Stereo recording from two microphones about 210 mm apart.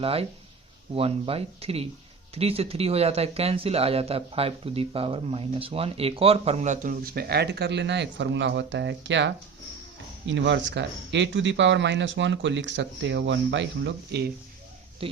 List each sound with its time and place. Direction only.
0.0 s speech: 30° right (ahead or behind); by 14.3 s 55° right (ahead or behind)